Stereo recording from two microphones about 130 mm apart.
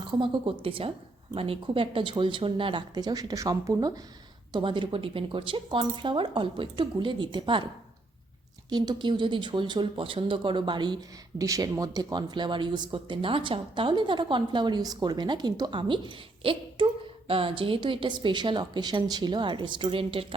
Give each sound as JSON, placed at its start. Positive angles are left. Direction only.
{"t": 0.1, "sound": "speech", "side_deg": -40}
{"t": 4.5, "sound": "speech", "side_deg": -40}
{"t": 8.7, "sound": "speech", "side_deg": -30}